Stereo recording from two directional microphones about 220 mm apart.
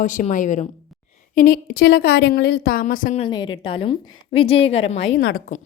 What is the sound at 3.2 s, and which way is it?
A woman's voice, 20° left (ahead or behind).